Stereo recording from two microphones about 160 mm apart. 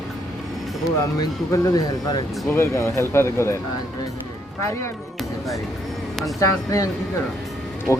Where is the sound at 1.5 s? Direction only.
20° left (ahead or behind).